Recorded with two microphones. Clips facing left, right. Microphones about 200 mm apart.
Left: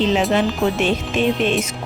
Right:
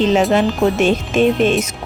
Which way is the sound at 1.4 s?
45° right (ahead or behind).